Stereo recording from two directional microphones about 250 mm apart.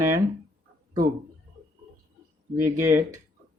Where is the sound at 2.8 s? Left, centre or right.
Centre.